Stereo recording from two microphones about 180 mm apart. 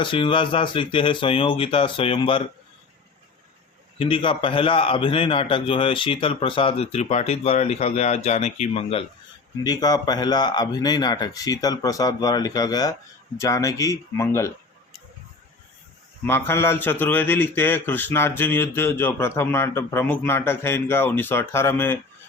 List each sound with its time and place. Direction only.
0.0 s speech: 30° left (ahead or behind)
3.9 s a man's voice: 30° left (ahead or behind)
9.6 s speech: 20° left (ahead or behind)
16.2 s a man's voice: 15° left (ahead or behind)